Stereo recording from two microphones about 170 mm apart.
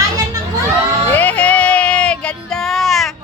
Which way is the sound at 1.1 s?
10° left (ahead or behind).